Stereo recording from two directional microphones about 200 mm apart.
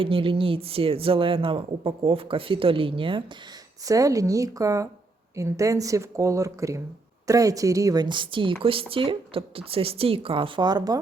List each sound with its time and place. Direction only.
0.0 s speech: 25° right (ahead or behind)